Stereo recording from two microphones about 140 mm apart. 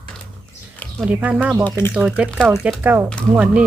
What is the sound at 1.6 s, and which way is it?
Speech, 15° left (ahead or behind).